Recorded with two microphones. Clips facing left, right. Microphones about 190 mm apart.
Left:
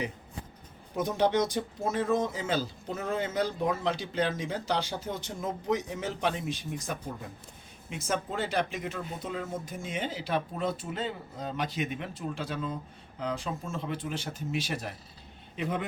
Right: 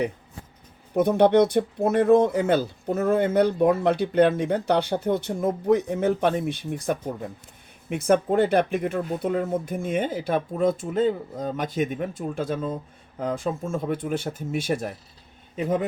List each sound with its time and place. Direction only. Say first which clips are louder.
0.9 s a man's voice: right 9 dB; 60° right (ahead or behind); by 15.8 s 40° right (ahead or behind)